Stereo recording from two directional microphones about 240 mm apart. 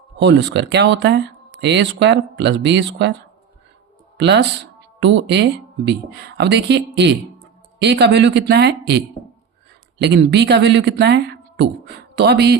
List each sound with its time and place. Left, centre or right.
0.2 s speech: right
4.2 s speech: right
10.0 s speech: right